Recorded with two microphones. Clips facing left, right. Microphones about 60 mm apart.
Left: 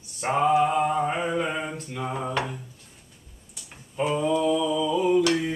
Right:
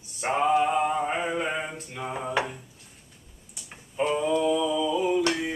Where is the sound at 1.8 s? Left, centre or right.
Centre.